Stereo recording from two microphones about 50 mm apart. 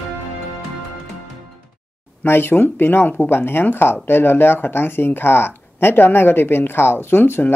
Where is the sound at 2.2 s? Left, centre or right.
Left.